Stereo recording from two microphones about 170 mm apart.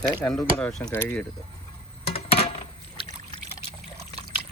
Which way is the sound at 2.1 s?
35° left (ahead or behind).